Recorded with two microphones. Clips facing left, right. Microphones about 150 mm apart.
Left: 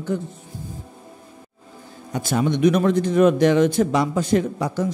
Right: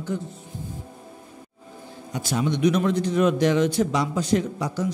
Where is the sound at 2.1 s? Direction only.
50° left (ahead or behind).